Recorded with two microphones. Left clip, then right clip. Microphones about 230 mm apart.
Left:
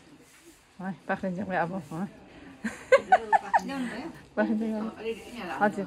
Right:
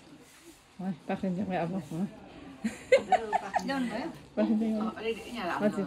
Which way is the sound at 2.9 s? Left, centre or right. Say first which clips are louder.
Left 4 dB; centre.